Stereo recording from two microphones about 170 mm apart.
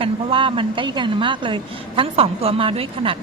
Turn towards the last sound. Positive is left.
turn(degrees=-30)  # may be behind; listen again after turning